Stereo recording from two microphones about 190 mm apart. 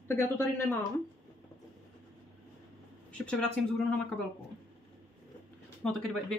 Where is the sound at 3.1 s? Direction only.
5° left (ahead or behind).